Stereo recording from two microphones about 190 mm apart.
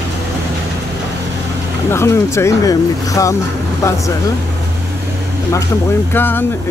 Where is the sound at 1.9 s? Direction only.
15° left (ahead or behind).